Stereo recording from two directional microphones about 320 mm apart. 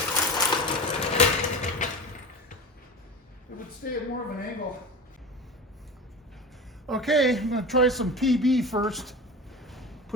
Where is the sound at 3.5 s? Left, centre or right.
Left.